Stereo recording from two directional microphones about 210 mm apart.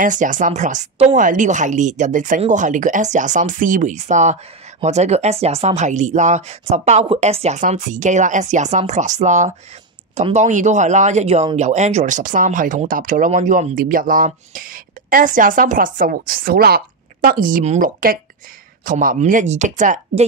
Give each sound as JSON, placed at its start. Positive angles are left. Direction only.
{"t": 0.0, "sound": "speech", "side_deg": -40}